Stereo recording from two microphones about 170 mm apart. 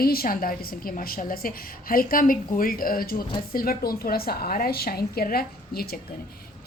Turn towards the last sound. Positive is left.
turn(degrees=65)  # may be behind; listen again after turning